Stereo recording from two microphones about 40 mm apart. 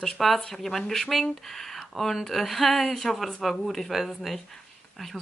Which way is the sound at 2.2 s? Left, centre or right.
Centre.